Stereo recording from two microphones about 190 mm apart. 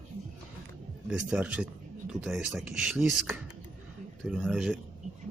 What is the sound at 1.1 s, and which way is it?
Speech, 5° right (ahead or behind).